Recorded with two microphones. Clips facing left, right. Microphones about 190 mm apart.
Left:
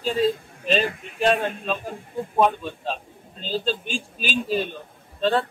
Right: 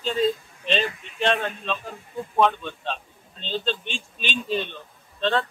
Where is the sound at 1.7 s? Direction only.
50° left (ahead or behind).